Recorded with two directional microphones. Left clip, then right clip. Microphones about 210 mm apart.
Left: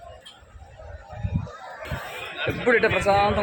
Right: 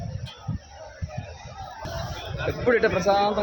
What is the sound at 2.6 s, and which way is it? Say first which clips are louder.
Speech: left 1 dB; 15° left (ahead or behind).